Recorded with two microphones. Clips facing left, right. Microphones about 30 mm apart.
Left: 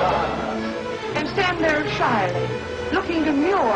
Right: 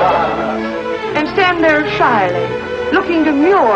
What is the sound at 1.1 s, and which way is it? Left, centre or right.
Music, right.